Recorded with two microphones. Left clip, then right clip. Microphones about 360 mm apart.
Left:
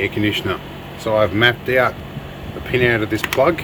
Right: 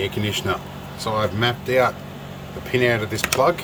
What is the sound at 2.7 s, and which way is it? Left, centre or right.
Speech, left.